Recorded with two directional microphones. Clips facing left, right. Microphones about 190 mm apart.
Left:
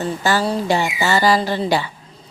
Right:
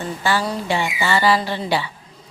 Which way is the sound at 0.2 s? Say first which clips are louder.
Left 1 dB; 40° left (ahead or behind).